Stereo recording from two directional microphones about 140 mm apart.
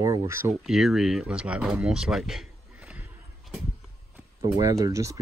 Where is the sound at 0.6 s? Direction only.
5° right (ahead or behind).